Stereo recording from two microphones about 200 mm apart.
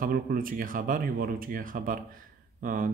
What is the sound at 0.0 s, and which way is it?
Speech, 45° right (ahead or behind).